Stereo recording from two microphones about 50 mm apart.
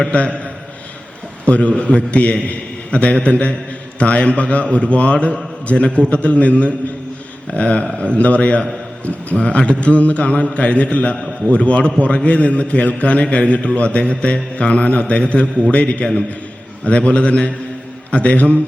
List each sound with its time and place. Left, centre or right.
0.1 s mantra: left
1.5 s mantra: left